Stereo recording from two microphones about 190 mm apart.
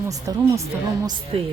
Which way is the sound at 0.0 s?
15° right (ahead or behind).